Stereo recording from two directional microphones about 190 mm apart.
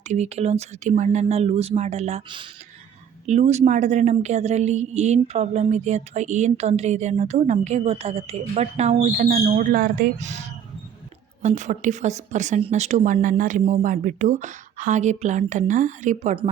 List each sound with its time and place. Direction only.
0.1 s a woman's voice: 35° right (ahead or behind)
11.4 s a woman's voice: 40° right (ahead or behind)